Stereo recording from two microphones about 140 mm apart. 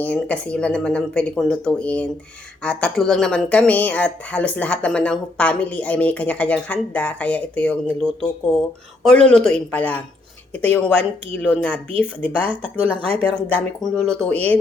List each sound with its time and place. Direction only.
0.0 s speech: 10° left (ahead or behind)
12.7 s speech: 45° right (ahead or behind)
13.8 s speech: 5° left (ahead or behind)